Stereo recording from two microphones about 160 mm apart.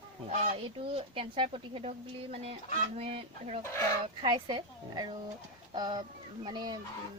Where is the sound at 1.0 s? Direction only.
35° right (ahead or behind).